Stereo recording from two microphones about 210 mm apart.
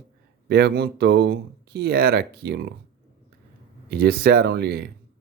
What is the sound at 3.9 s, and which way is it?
Speech, 45° right (ahead or behind).